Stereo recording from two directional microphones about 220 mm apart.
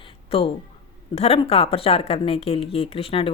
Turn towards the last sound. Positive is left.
turn(degrees=25)  # may be behind; listen again after turning